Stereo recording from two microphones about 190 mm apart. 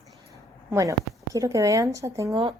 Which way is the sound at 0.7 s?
15° right (ahead or behind).